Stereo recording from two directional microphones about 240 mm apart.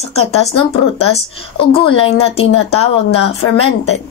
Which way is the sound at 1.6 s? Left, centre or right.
Left.